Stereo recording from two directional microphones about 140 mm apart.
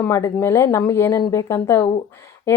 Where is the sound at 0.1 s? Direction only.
20° left (ahead or behind).